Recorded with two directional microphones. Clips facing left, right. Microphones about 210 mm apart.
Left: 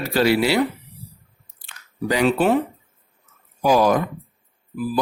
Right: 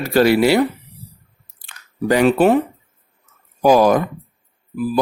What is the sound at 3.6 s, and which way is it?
Speech, 50° right (ahead or behind).